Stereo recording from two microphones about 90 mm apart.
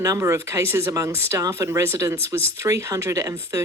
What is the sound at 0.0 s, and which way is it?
Speech, 35° right (ahead or behind).